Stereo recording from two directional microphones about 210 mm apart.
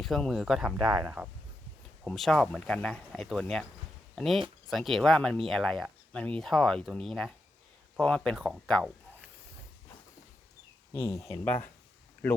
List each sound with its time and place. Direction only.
0.0 s speech: centre (ahead or behind)
11.3 s speech: 35° left (ahead or behind)